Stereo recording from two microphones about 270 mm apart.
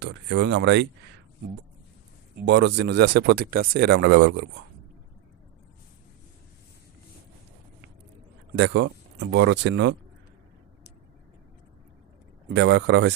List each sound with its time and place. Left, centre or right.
0.0 s speech: right
2.5 s speech: right
8.5 s speech: right
12.5 s speech: right